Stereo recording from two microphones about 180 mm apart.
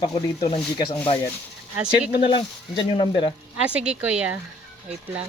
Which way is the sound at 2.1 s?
25° left (ahead or behind).